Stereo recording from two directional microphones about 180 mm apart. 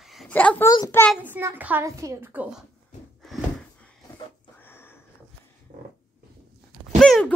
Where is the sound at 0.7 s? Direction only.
20° left (ahead or behind).